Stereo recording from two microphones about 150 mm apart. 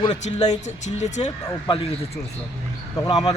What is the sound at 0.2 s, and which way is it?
Speech, 50° left (ahead or behind).